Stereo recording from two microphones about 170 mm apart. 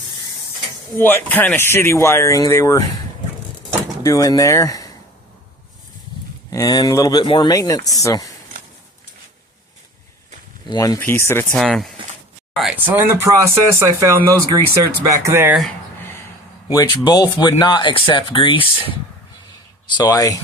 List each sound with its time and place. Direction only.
0.9 s speech: 10° left (ahead or behind)
4.0 s speech: 20° left (ahead or behind)
6.5 s speech: 20° left (ahead or behind)
10.7 s speech: 20° left (ahead or behind)
11.5 s speech: centre (ahead or behind); by 15.5 s 15° right (ahead or behind)
16.6 s speech: 25° left (ahead or behind)
19.9 s speech: 25° left (ahead or behind)